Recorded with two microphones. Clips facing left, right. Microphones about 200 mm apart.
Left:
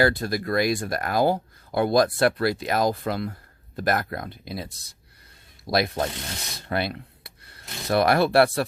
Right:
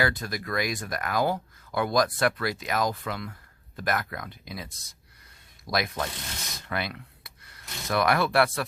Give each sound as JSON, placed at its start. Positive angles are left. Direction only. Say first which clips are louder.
{"t": 0.0, "sound": "speech", "louder": "left 6 dB", "side_deg": 35}
{"t": 6.7, "sound": "rub", "louder": "left 6 dB", "side_deg": 35}